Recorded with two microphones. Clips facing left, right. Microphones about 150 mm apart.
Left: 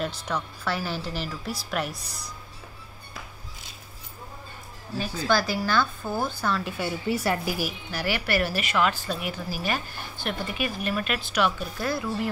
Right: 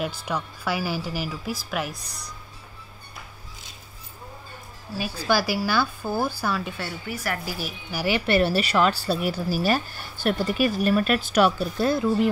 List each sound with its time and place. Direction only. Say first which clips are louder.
0.0 s a woman's voice: right 1 dB; 10° right (ahead or behind)
5.2 s a woman's voice: right 1 dB; 10° right (ahead or behind)
6.8 s speech: left 5 dB; 20° left (ahead or behind)
7.9 s a woman's voice: right 6 dB; 15° right (ahead or behind)
8.3 s a woman's voice: right 7 dB; 30° right (ahead or behind)
11.8 s speech: right 7 dB; 25° right (ahead or behind)